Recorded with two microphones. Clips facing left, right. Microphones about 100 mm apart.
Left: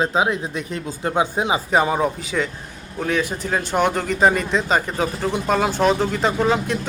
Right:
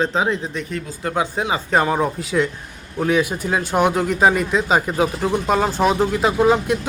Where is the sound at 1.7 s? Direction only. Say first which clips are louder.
Right 1 dB; 5° left (ahead or behind).